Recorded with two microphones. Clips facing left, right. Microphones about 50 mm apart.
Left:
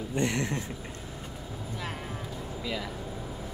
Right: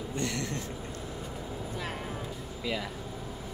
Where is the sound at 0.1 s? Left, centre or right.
Left.